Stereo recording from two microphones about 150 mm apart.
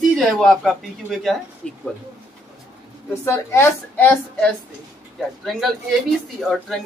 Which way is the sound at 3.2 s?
20° left (ahead or behind).